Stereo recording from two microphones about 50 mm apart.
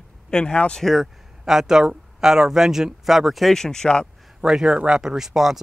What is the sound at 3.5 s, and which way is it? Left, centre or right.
Speech, centre.